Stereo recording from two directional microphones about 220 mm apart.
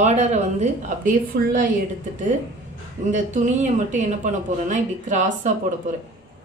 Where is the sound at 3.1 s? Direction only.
35° right (ahead or behind).